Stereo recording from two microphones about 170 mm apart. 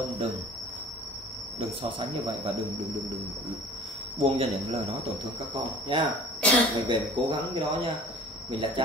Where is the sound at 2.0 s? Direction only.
30° right (ahead or behind).